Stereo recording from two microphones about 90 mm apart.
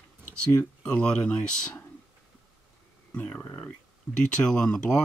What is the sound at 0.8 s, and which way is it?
Speech, 10° left (ahead or behind).